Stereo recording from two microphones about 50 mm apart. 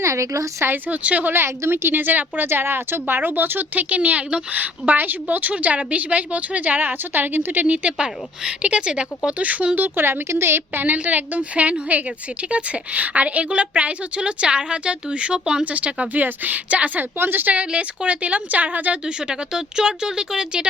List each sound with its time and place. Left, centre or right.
0.0 s a woman's voice: right
0.9 s speech: right
1.3 s a woman's voice: right
4.6 s a woman's voice: right
7.9 s a woman's voice: centre; by 10.9 s right
10.9 s speech: right
16.2 s a woman's voice: right
17.2 s a woman's voice: right
17.7 s speech: right
19.0 s speech: centre